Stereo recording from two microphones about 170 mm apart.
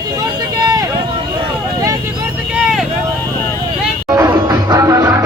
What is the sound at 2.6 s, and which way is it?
Vehicle, centre (ahead or behind).